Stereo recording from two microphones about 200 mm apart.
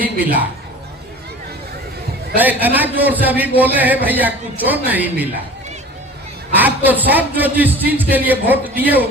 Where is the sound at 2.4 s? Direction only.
10° right (ahead or behind).